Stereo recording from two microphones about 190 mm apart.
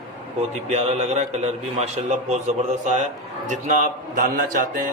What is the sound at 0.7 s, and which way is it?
A man's voice, 35° right (ahead or behind).